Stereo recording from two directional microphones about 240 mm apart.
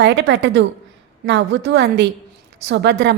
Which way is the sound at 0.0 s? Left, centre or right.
Right.